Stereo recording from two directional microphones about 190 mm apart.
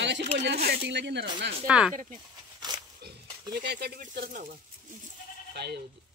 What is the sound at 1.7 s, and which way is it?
Speech, 5° right (ahead or behind).